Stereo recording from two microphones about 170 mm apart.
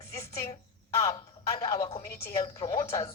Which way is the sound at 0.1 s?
15° left (ahead or behind).